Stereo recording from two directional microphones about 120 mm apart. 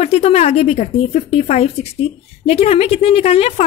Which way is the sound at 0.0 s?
60° left (ahead or behind).